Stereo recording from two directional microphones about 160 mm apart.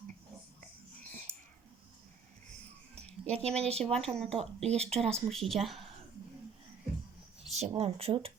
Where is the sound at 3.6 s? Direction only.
40° right (ahead or behind).